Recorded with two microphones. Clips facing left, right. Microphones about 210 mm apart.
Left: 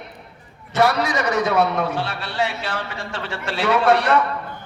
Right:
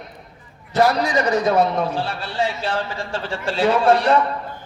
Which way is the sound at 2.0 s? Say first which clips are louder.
Right 1 dB; 65° left (ahead or behind).